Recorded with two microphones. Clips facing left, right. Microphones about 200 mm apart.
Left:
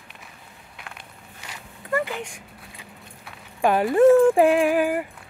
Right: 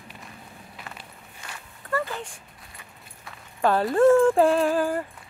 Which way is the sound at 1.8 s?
15° left (ahead or behind).